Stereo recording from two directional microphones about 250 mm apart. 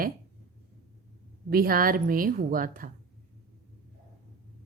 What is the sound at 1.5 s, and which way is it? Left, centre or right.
A woman's voice, right.